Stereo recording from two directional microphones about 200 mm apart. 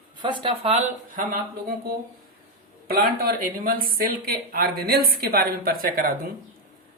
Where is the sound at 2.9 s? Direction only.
50° right (ahead or behind).